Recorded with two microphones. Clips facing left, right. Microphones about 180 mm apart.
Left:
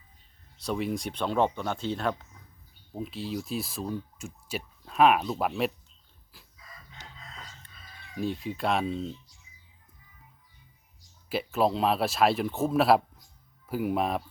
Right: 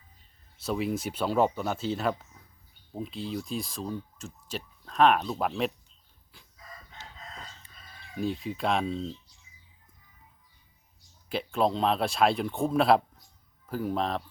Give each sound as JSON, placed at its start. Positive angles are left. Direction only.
{"t": 0.6, "sound": "speech", "side_deg": 0}
{"t": 6.3, "sound": "chicken", "side_deg": 5}
{"t": 7.0, "sound": "chicken", "side_deg": 15}
{"t": 8.1, "sound": "speech", "side_deg": 0}
{"t": 11.3, "sound": "speech", "side_deg": 5}